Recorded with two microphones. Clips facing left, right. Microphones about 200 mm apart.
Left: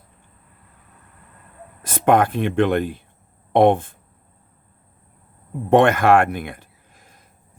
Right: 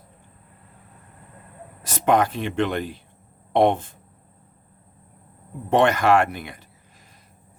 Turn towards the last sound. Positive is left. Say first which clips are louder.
# left 3 dB
turn(degrees=50)  # may be behind; listen again after turning